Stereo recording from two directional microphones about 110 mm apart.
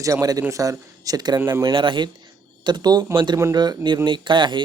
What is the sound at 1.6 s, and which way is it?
Speech, 50° right (ahead or behind).